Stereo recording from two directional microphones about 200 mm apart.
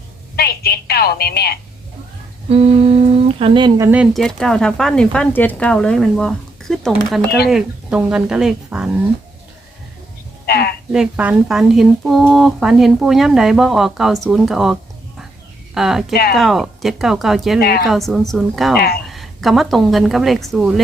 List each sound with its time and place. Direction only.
0.3 s telephone: 50° left (ahead or behind)
2.5 s speech: 30° right (ahead or behind)
3.8 s speech: 5° right (ahead or behind)
10.4 s a sound: 50° left (ahead or behind)
10.9 s speech: 5° right (ahead or behind)
17.6 s a woman's voice: 50° left (ahead or behind)
17.8 s speech: centre (ahead or behind)